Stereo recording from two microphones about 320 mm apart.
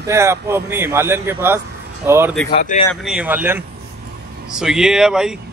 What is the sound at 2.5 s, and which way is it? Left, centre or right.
Speech, left.